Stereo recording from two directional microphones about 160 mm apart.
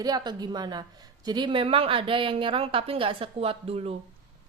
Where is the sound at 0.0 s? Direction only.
25° right (ahead or behind).